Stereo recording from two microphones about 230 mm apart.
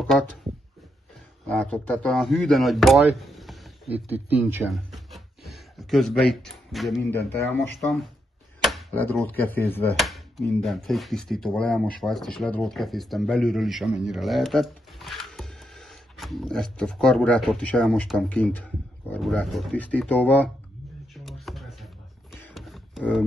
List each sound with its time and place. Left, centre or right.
1.5 s speech: centre
8.6 s speech: centre
21.1 s a sound: centre